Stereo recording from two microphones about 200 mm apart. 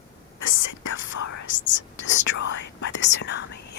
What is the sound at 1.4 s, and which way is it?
Whispering, 70° left (ahead or behind).